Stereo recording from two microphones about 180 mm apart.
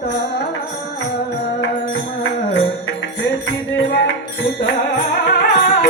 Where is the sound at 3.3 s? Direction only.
90° left.